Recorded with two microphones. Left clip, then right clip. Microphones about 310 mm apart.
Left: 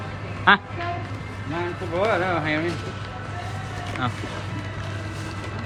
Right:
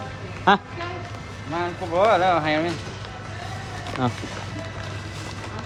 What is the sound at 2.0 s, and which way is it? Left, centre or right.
Speech, right.